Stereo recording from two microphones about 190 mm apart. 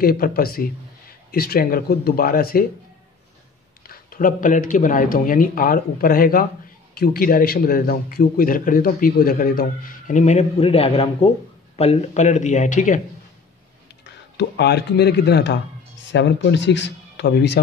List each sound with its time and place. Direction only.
0.0 s a man's voice: 50° left (ahead or behind)
3.8 s a man's voice: 50° left (ahead or behind)
14.0 s speech: 65° left (ahead or behind)